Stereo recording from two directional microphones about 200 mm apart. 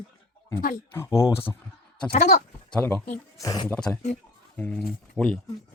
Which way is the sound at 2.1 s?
35° left (ahead or behind).